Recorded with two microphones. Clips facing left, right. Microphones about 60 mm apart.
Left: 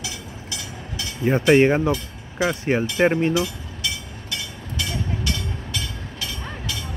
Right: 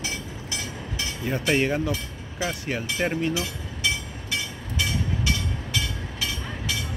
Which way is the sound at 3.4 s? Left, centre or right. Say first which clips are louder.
Even; right.